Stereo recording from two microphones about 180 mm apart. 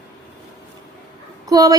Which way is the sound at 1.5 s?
20° right (ahead or behind).